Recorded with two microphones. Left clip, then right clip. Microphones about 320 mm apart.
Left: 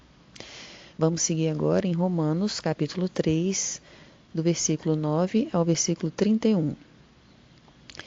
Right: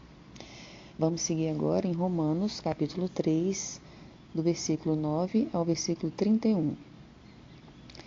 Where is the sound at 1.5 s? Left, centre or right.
Left.